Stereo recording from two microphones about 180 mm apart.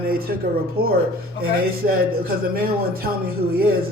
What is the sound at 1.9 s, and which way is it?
Speech, 55° right (ahead or behind).